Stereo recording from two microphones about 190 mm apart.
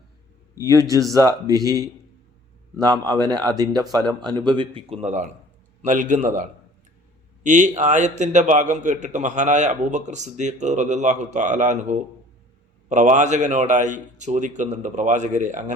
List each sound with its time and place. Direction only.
0.5 s a man's voice: 20° right (ahead or behind); by 15.7 s 40° right (ahead or behind)